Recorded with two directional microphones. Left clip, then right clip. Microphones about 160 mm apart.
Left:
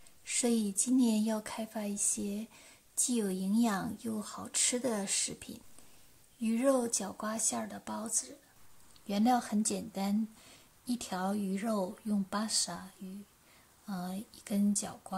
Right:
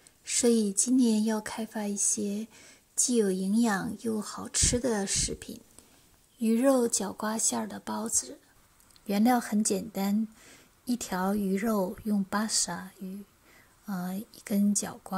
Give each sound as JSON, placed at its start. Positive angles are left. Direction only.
{"t": 0.2, "sound": "a woman's voice", "side_deg": -20}